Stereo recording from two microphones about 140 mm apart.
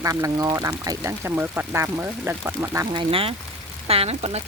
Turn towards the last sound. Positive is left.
turn(degrees=-45)  # may be behind; listen again after turning